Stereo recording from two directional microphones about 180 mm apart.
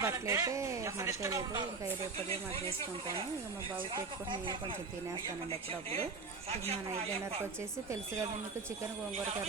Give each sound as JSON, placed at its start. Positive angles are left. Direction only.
{"t": 0.0, "sound": "speech", "side_deg": -15}